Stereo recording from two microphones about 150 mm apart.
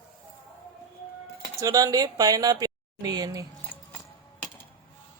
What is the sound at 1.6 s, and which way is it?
A woman's voice, 25° right (ahead or behind).